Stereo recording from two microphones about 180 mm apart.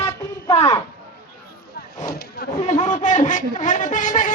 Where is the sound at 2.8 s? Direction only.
40° left (ahead or behind).